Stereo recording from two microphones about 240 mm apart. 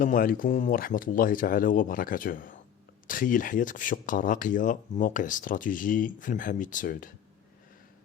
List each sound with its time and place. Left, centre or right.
0.0 s speech: left